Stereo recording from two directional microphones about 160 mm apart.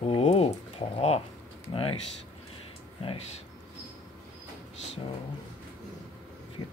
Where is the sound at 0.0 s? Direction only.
40° left (ahead or behind).